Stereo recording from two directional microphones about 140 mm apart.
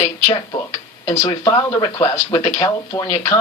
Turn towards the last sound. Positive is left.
turn(degrees=30)  # may be behind; listen again after turning